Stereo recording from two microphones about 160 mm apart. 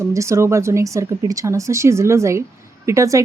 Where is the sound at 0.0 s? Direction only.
20° right (ahead or behind).